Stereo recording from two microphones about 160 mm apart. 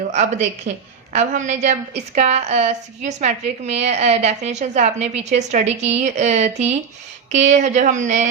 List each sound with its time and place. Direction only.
0.1 s a woman's voice: 45° right (ahead or behind)